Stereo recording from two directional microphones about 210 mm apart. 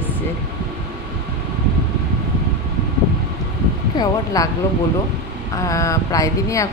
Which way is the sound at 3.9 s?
20° left (ahead or behind).